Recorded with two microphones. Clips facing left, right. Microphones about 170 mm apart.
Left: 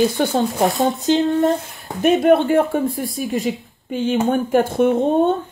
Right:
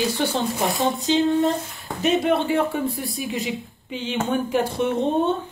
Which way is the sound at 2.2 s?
50° left (ahead or behind).